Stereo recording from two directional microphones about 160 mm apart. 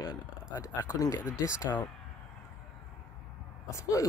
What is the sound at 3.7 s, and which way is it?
Speech, 20° left (ahead or behind).